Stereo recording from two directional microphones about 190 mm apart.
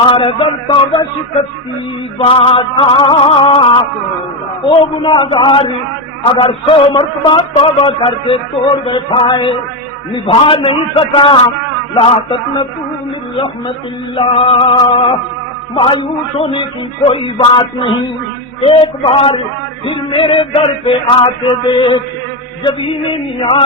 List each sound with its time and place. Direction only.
0.0 s a man's voice: 30° left (ahead or behind)
2.1 s a man's voice: 30° left (ahead or behind)
14.2 s a man's voice: 30° left (ahead or behind)